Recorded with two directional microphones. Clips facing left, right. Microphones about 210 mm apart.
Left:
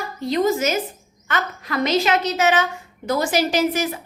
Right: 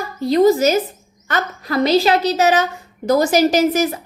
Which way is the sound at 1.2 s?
35° right (ahead or behind).